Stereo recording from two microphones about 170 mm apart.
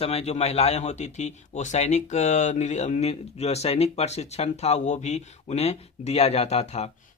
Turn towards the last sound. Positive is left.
turn(degrees=40)  # may be behind; listen again after turning